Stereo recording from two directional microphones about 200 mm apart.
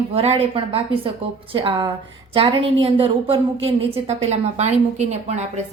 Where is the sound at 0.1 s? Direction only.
30° right (ahead or behind).